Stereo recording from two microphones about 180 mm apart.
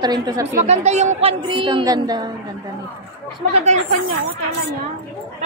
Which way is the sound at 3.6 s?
40° right (ahead or behind).